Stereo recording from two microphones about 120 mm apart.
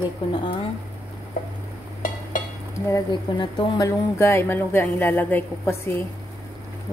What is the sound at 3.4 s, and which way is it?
Speech, 30° left (ahead or behind).